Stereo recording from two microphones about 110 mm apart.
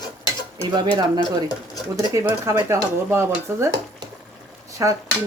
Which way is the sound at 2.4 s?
25° right (ahead or behind).